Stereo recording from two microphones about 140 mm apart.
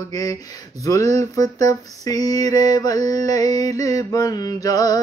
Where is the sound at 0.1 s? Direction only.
25° left (ahead or behind).